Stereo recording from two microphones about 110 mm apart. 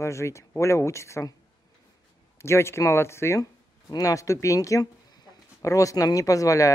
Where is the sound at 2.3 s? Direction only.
25° left (ahead or behind).